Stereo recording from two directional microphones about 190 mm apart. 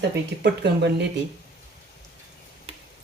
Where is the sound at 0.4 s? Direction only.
65° right (ahead or behind).